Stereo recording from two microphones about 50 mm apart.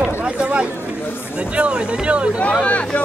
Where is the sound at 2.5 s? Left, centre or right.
Left.